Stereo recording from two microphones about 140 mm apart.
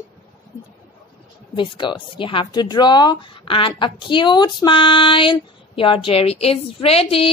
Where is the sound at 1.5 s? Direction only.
35° left (ahead or behind).